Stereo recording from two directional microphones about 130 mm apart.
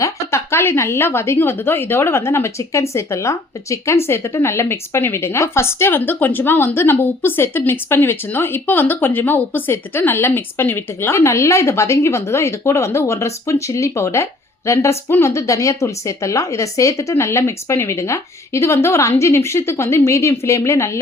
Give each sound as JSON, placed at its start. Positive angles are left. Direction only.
{"t": 0.0, "sound": "speech", "side_deg": 20}